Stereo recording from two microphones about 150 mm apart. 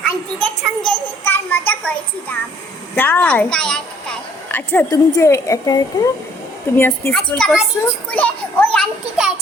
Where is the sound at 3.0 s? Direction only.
15° left (ahead or behind).